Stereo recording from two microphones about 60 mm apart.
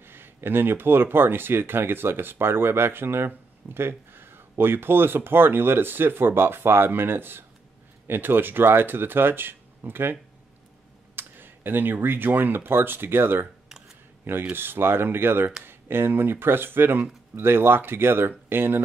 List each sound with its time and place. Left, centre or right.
0.0 s speech: right
11.1 s speech: right
13.7 s a sound: centre
14.5 s speech: right